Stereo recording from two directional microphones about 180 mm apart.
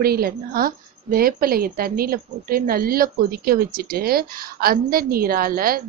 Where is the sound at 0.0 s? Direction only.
55° right (ahead or behind).